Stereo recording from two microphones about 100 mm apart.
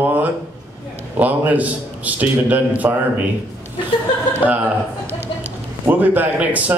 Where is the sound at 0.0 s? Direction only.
15° right (ahead or behind).